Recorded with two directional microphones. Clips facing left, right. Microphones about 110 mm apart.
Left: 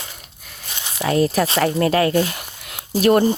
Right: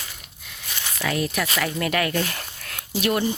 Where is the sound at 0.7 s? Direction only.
20° left (ahead or behind).